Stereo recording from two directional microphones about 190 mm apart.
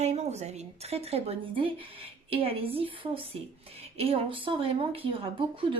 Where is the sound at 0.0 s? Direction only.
35° right (ahead or behind).